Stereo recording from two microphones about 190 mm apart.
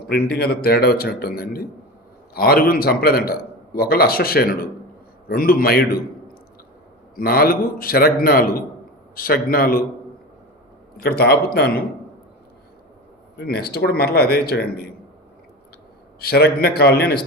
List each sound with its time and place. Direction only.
0.1 s a man's voice: 55° left (ahead or behind)
7.2 s a man's voice: 50° left (ahead or behind)
10.9 s a man's voice: 50° left (ahead or behind)
13.3 s a man's voice: 55° left (ahead or behind)
16.2 s a man's voice: 55° left (ahead or behind)